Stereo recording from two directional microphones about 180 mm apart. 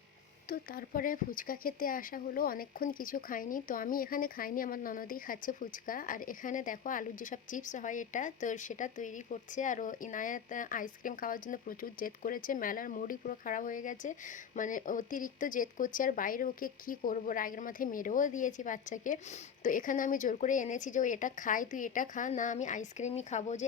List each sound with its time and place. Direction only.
0.4 s speech: 55° left (ahead or behind); by 23.6 s 40° left (ahead or behind)